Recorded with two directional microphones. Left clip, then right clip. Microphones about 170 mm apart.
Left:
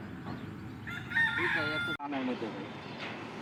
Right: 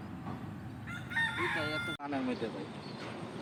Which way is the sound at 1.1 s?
40° left (ahead or behind).